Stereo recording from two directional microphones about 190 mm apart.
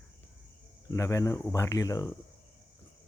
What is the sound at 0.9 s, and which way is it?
Speech, 15° left (ahead or behind).